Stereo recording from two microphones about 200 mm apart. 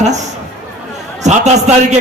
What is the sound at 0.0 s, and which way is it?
A man's voice, 35° right (ahead or behind).